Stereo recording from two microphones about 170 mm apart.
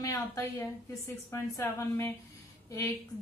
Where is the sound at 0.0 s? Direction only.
15° left (ahead or behind).